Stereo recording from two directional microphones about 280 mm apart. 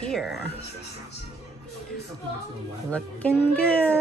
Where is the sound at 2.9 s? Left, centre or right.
Centre.